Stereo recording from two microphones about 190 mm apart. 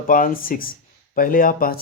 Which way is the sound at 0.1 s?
45° left (ahead or behind).